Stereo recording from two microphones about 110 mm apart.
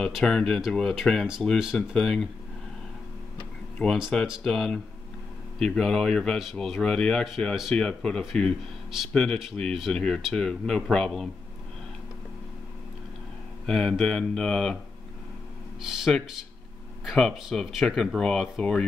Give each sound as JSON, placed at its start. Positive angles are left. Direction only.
{"t": 0.0, "sound": "speech", "side_deg": 5}
{"t": 3.7, "sound": "speech", "side_deg": 10}
{"t": 13.7, "sound": "speech", "side_deg": 5}
{"t": 15.8, "sound": "speech", "side_deg": -5}